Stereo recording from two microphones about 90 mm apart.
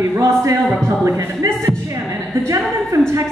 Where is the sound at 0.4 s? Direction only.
30° right (ahead or behind).